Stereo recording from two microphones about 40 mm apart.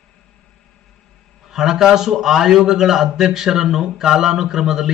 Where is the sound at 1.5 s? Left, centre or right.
Centre.